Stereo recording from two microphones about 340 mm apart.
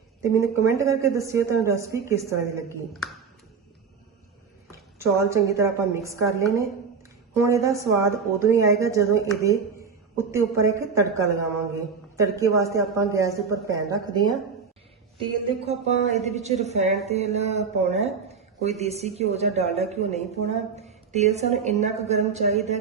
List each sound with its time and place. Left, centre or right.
0.2 s speech: centre
4.7 s a woman's voice: centre